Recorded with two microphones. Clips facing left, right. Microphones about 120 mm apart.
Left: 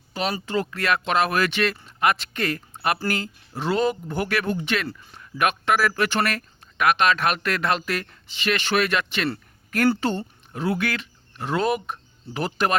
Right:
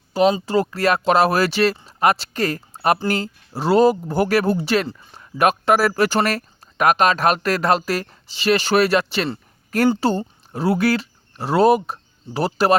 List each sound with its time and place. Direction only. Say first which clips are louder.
0.2 s speech: right 10 dB; 20° right (ahead or behind)
0.4 s speech: right 6 dB; 35° right (ahead or behind)